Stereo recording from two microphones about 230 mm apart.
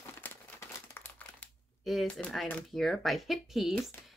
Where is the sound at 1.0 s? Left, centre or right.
Centre.